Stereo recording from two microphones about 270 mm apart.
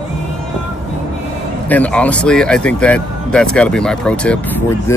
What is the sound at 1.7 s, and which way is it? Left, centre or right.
Speech, centre.